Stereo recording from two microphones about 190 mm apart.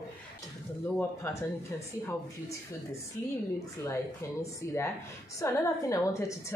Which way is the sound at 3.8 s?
15° left (ahead or behind).